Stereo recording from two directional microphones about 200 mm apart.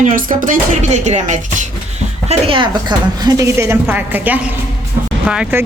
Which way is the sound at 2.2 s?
25° right (ahead or behind).